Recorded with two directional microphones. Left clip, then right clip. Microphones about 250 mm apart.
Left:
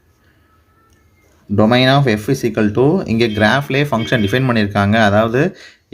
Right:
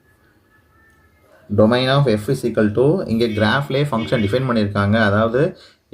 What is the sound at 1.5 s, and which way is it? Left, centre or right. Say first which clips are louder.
Speech: left 3 dB; left.